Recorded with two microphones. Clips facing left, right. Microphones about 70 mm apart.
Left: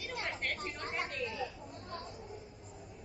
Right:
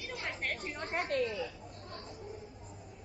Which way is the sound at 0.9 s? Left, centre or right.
Right.